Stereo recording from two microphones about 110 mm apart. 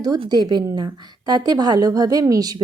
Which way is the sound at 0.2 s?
40° right (ahead or behind).